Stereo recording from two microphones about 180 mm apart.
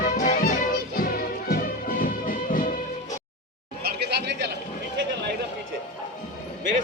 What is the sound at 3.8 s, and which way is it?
Chatter, 65° right (ahead or behind).